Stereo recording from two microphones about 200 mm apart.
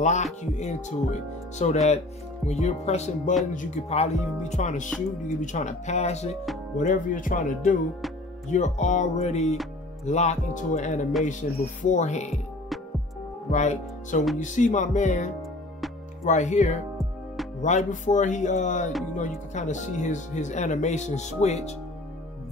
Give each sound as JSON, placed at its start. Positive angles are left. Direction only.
{"t": 0.0, "sound": "speech", "side_deg": 35}
{"t": 13.5, "sound": "speech", "side_deg": 35}
{"t": 16.3, "sound": "speech", "side_deg": 35}